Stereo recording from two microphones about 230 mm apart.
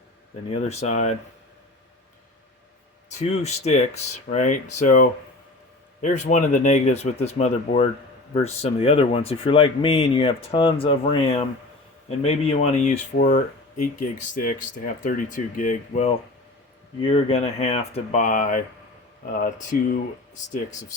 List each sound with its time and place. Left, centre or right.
0.5 s speech: left
3.1 s speech: left
19.7 s speech: left